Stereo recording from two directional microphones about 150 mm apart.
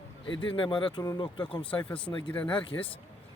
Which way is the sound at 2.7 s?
20° left (ahead or behind).